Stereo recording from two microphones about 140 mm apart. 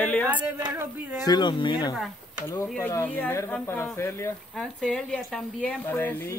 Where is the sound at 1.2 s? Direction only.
30° left (ahead or behind).